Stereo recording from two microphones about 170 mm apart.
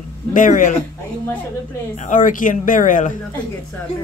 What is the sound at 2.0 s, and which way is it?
Speech, 50° left (ahead or behind).